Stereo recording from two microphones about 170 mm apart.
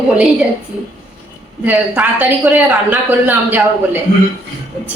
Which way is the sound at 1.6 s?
10° right (ahead or behind).